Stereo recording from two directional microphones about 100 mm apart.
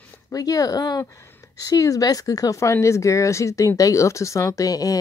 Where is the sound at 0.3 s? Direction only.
35° left (ahead or behind).